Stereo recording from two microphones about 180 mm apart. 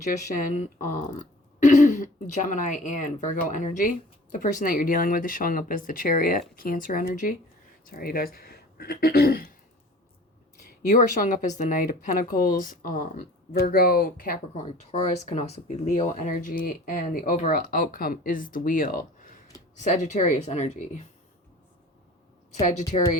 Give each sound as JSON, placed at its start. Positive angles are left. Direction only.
{"t": 0.0, "sound": "speech", "side_deg": 45}
{"t": 10.8, "sound": "speech", "side_deg": 50}
{"t": 14.6, "sound": "speech", "side_deg": 40}